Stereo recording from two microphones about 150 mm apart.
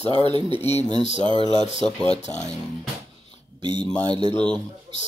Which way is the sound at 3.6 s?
30° right (ahead or behind).